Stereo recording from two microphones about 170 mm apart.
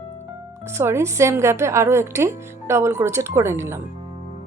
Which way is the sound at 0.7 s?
15° right (ahead or behind).